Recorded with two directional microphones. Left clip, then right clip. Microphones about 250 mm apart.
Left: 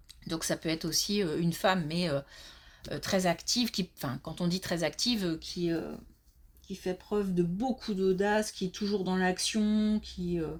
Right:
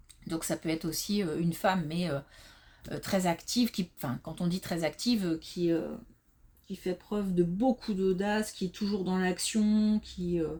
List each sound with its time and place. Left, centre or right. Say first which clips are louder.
0.3 s speech: left 1 dB; left
6.8 s speech: left 2 dB; centre